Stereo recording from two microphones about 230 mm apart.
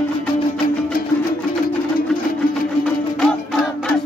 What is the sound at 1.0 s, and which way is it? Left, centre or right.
Music, left.